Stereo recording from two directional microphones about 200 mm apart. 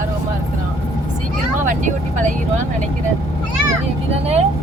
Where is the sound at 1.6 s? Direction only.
40° right (ahead or behind).